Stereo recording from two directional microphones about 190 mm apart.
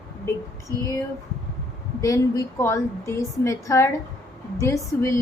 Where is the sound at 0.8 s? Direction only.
15° left (ahead or behind).